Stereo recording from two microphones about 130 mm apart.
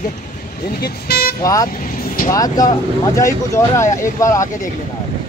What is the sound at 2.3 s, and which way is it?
Speech, 30° left (ahead or behind).